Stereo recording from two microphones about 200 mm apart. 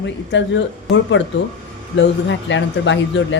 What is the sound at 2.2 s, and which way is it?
A woman's voice, 65° left (ahead or behind).